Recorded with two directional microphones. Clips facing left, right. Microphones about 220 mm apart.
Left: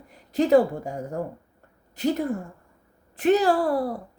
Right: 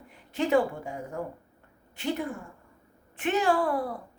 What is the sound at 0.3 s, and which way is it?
A woman's voice, 40° left (ahead or behind).